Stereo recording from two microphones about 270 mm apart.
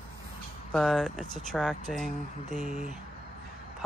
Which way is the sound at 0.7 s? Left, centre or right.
Centre.